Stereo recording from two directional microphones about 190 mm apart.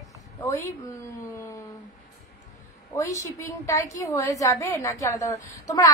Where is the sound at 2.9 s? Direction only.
15° left (ahead or behind).